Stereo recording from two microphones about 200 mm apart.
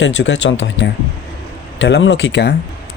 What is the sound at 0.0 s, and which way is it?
Speech, 60° left (ahead or behind).